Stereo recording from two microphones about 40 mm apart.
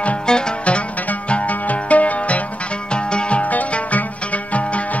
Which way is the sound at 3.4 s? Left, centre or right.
Left.